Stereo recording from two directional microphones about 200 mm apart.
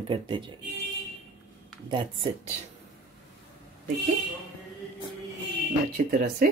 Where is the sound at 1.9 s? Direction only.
25° right (ahead or behind).